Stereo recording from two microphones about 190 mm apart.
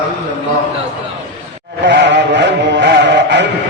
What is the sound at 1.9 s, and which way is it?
Music, 65° right (ahead or behind).